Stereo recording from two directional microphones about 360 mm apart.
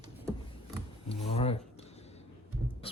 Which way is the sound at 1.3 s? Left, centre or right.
Centre.